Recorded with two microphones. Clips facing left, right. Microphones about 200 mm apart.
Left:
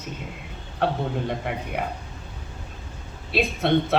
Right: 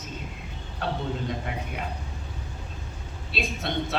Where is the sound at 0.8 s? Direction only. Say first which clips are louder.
Left 5 dB; 60° left (ahead or behind).